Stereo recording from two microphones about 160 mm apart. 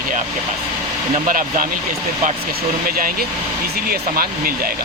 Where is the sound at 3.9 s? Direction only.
65° right (ahead or behind).